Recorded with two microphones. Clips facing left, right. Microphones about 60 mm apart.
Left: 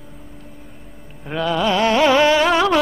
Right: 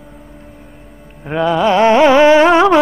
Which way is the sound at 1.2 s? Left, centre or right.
Right.